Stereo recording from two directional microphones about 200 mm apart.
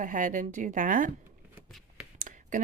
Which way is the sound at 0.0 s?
40° right (ahead or behind).